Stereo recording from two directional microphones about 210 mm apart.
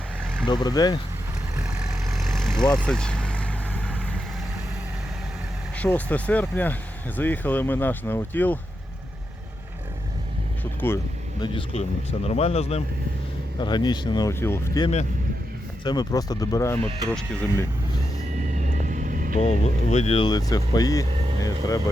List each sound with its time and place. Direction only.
0.4 s speech: 20° left (ahead or behind)
1.8 s vehicle: centre (ahead or behind)
5.7 s speech: 5° left (ahead or behind)
10.6 s speech: 10° left (ahead or behind)
18.3 s vehicle: 35° right (ahead or behind)
19.4 s speech: 30° left (ahead or behind)
21.1 s vehicle: 25° right (ahead or behind)